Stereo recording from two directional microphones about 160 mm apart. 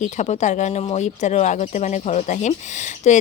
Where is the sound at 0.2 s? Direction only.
50° left (ahead or behind).